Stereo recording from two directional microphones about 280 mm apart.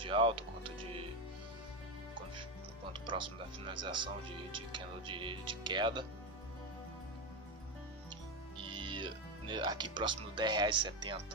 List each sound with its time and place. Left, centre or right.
0.0 s music: centre
2.9 s speech: centre
8.5 s speech: centre